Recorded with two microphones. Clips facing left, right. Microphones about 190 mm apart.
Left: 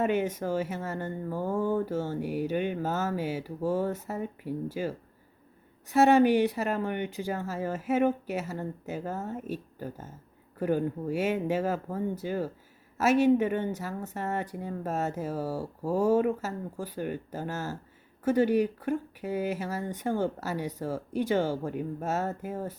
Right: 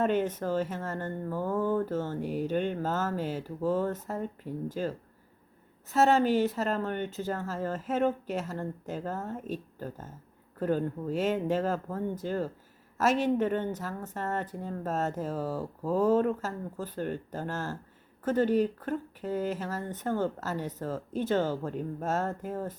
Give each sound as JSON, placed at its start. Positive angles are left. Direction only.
{"t": 0.0, "sound": "speech", "side_deg": 10}